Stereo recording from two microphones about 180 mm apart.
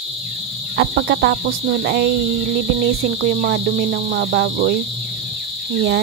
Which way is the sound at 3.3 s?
60° right (ahead or behind).